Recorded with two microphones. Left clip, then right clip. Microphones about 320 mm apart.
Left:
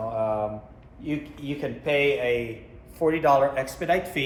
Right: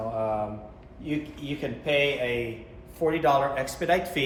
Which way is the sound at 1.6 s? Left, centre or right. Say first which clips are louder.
Left 1 dB; centre.